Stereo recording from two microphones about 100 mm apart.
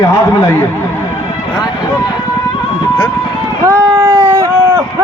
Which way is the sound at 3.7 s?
35° right (ahead or behind).